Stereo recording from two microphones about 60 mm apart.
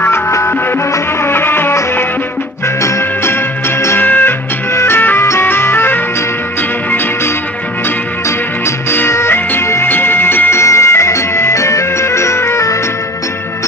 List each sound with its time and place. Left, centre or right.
0.0 s music: left
0.9 s music: left
3.9 s music: left
4.7 s music: left
4.9 s music: left
5.2 s music: left
8.6 s music: left
10.6 s music: left